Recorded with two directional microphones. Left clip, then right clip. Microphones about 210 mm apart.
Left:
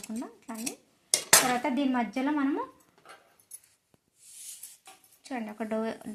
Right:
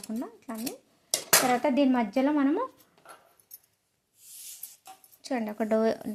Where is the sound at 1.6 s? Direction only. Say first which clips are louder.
Right 4 dB; 40° right (ahead or behind).